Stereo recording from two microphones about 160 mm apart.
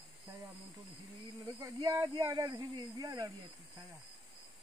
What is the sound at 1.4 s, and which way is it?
Speech, 20° right (ahead or behind).